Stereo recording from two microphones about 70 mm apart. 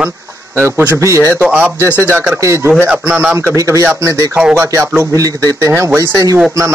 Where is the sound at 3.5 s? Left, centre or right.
Right.